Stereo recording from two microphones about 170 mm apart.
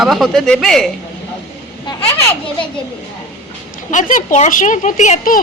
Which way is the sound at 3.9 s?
45° left (ahead or behind).